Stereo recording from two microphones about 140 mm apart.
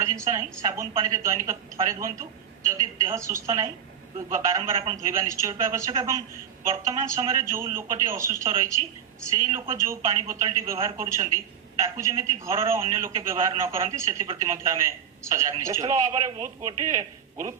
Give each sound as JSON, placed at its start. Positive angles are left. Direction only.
{"t": 0.0, "sound": "a man's voice", "side_deg": -25}
{"t": 11.8, "sound": "a man's voice", "side_deg": -20}